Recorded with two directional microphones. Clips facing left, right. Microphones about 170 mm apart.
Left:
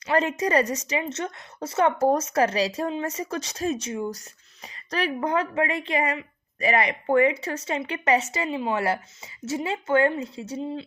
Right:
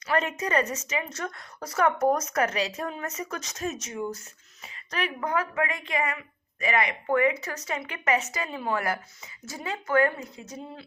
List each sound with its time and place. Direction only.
0.1 s a woman's voice: 30° left (ahead or behind)